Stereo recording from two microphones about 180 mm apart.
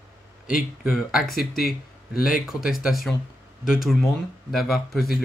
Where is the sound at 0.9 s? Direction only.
Centre (ahead or behind).